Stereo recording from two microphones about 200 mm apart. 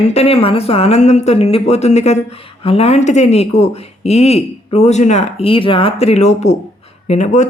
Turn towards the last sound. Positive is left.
turn(degrees=35)  # may be behind; listen again after turning